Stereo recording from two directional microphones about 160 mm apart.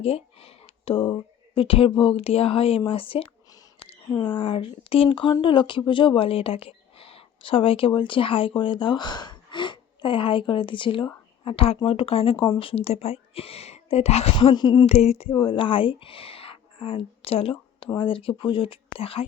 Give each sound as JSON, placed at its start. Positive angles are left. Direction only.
{"t": 0.0, "sound": "a woman's voice", "side_deg": 40}
{"t": 14.5, "sound": "speech", "side_deg": 30}
{"t": 14.9, "sound": "a woman's voice", "side_deg": 40}